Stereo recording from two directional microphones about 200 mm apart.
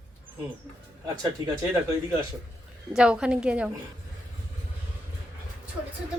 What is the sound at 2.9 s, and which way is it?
Speech, 5° right (ahead or behind).